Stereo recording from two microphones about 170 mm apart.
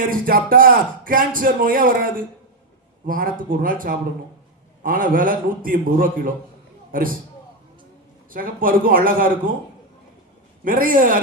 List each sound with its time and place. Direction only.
0.1 s speech: 55° right (ahead or behind)
8.3 s speech: 55° right (ahead or behind)
10.6 s speech: 55° right (ahead or behind)